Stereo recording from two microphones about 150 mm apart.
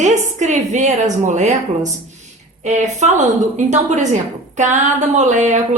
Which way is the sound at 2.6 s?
50° right (ahead or behind).